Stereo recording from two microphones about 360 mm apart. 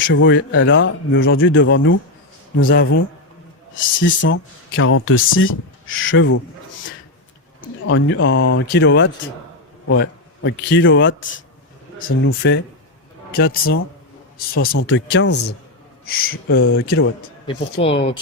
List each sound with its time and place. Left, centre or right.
0.1 s a man's voice: left
4.0 s speech: left
7.6 s a man's voice: left
16.0 s a man's voice: left
17.4 s speech: centre